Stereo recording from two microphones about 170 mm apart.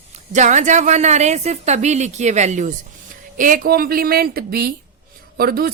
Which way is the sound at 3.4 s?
55° right (ahead or behind).